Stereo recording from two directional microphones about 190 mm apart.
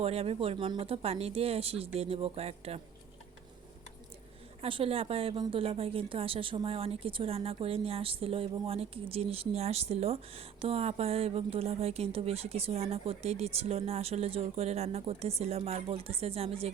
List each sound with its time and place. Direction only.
0.0 s a woman's voice: 30° right (ahead or behind)
4.6 s a woman's voice: 30° right (ahead or behind)